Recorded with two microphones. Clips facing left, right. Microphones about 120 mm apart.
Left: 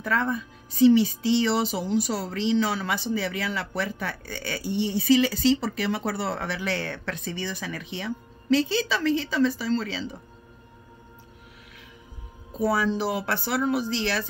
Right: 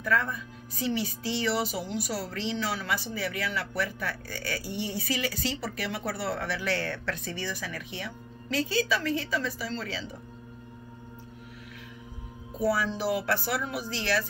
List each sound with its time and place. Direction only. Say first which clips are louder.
0.0 s a woman's voice: left 3 dB; 25° left (ahead or behind)
12.5 s a woman's voice: left 3 dB; 25° left (ahead or behind)